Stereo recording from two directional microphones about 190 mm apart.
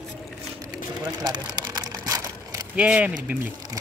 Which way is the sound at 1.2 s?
20° right (ahead or behind).